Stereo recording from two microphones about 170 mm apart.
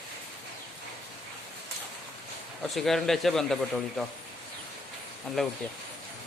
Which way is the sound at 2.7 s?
Centre (ahead or behind).